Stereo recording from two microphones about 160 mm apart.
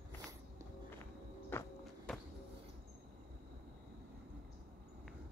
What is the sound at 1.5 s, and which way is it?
Walk, 15° left (ahead or behind).